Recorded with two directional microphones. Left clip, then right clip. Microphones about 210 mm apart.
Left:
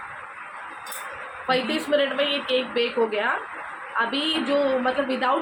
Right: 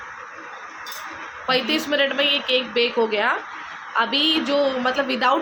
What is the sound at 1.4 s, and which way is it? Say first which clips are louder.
A woman's voice: right 3 dB; 30° right (ahead or behind).